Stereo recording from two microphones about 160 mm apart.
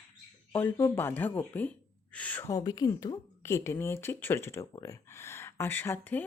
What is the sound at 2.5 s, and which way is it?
Speech, 25° left (ahead or behind).